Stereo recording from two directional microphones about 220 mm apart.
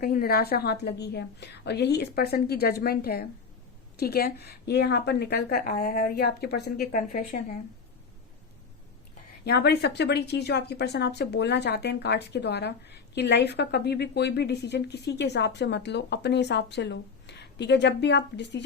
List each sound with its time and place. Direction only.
0.0 s speech: 40° left (ahead or behind)
9.4 s speech: 50° left (ahead or behind)